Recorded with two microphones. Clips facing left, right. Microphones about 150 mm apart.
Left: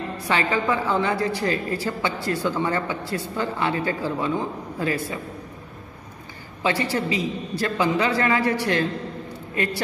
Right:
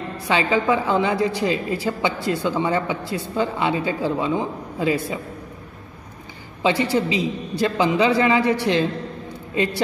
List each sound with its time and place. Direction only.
0.3 s a woman's voice: 15° right (ahead or behind)
6.6 s a woman's voice: 20° right (ahead or behind)